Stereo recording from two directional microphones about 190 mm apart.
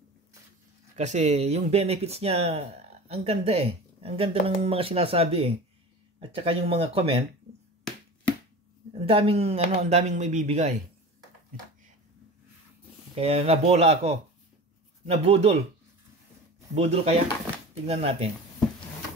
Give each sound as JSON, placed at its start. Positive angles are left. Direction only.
{"t": 0.9, "sound": "speech", "side_deg": -35}
{"t": 9.0, "sound": "speech", "side_deg": -30}
{"t": 13.1, "sound": "speech", "side_deg": -30}
{"t": 16.7, "sound": "speech", "side_deg": -35}